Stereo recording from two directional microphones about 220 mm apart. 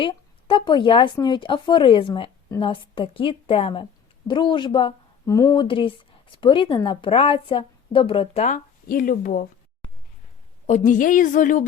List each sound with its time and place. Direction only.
0.0 s speech: 20° left (ahead or behind); by 9.5 s 40° left (ahead or behind)
10.7 s a woman's voice: 35° left (ahead or behind)